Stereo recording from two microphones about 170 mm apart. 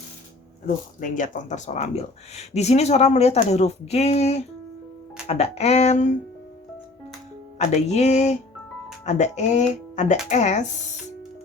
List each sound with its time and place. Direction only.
0.9 s speech: 50° left (ahead or behind)
7.8 s speech: 40° left (ahead or behind)